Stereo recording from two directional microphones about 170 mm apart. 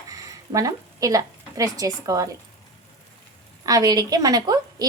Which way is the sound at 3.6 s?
20° right (ahead or behind).